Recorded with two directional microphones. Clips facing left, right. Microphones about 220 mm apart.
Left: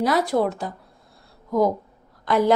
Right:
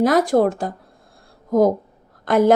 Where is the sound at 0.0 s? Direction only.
45° right (ahead or behind).